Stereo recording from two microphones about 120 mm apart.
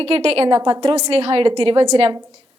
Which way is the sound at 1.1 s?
50° right (ahead or behind).